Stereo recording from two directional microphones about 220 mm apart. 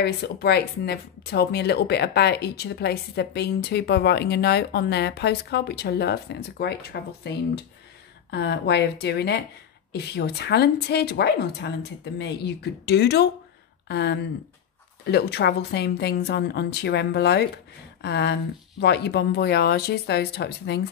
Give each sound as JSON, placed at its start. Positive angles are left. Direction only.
{"t": 0.0, "sound": "speech", "side_deg": 45}